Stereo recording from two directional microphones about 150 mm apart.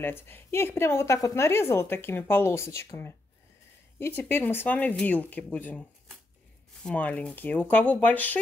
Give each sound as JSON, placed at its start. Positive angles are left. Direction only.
{"t": 0.0, "sound": "speech", "side_deg": 15}